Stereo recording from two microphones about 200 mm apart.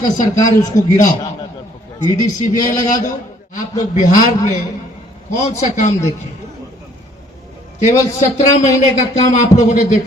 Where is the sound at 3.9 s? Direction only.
40° left (ahead or behind).